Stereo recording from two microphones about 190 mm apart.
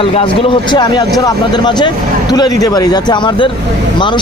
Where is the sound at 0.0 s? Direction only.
30° left (ahead or behind).